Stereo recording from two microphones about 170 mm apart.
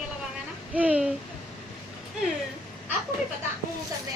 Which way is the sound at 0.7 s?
10° right (ahead or behind).